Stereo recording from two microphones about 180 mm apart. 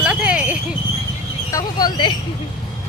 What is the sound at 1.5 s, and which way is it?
Speech, 20° left (ahead or behind).